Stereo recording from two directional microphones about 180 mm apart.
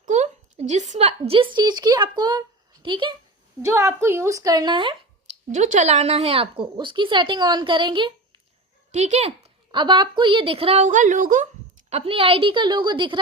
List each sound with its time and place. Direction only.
0.0 s a woman's voice: 40° right (ahead or behind)
3.7 s a woman's voice: 15° right (ahead or behind)
5.5 s speech: 45° right (ahead or behind); by 8.1 s 25° right (ahead or behind)
8.9 s a woman's voice: 40° right (ahead or behind)
9.7 s a woman's voice: 25° right (ahead or behind); by 11.4 s 45° right (ahead or behind)
11.9 s speech: 35° right (ahead or behind)